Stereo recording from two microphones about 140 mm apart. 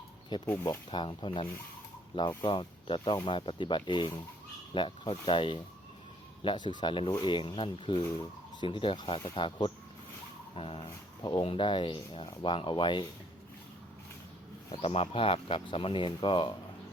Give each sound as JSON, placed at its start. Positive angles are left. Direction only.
{"t": 0.6, "sound": "speech", "side_deg": 30}
{"t": 14.8, "sound": "speech", "side_deg": 45}